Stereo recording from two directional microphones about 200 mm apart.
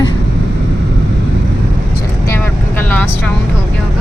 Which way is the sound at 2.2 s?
10° left (ahead or behind).